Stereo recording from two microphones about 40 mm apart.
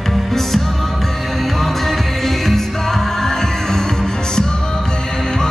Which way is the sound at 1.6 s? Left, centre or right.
Centre.